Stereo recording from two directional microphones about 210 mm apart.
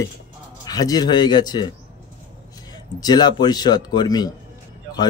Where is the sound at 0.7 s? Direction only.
20° left (ahead or behind).